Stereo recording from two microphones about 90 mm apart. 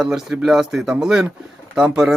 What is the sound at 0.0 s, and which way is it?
Speech, 5° right (ahead or behind).